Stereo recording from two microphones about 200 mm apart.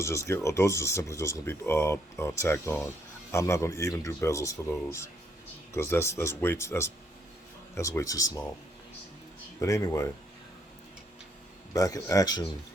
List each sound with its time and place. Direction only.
0.0 s speech: 15° left (ahead or behind)
9.6 s speech: 15° left (ahead or behind)
11.7 s speech: 15° left (ahead or behind)